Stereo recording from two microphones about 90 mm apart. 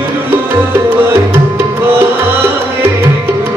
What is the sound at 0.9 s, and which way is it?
Tabla, 25° right (ahead or behind).